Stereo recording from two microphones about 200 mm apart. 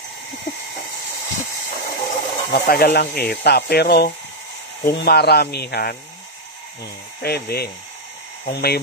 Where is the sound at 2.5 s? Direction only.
50° left (ahead or behind).